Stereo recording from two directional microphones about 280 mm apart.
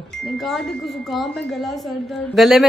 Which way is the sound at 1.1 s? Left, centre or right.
Centre.